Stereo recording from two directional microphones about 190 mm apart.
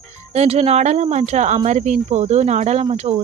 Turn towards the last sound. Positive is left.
turn(degrees=-35)  # may be behind; listen again after turning